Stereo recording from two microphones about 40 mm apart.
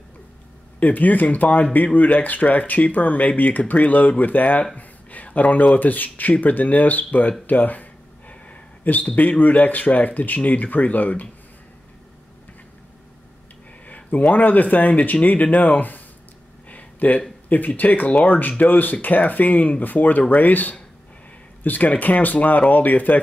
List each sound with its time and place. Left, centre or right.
0.7 s speech: left
13.8 s speech: left
16.6 s a sound: left
17.5 s speech: left